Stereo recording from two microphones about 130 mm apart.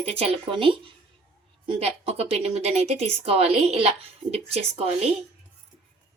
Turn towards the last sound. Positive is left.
turn(degrees=-50)  # may be behind; listen again after turning